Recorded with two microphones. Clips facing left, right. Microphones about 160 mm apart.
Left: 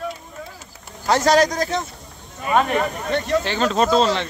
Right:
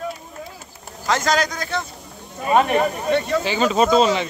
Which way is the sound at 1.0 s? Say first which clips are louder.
Left 4 dB; 35° left (ahead or behind).